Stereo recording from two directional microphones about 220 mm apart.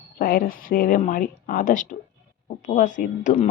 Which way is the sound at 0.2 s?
40° left (ahead or behind).